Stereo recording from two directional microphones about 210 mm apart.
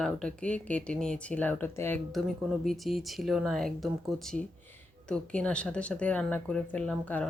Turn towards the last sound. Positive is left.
turn(degrees=5)  # may be behind; listen again after turning